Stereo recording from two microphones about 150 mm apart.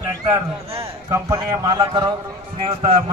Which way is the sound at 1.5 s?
30° right (ahead or behind).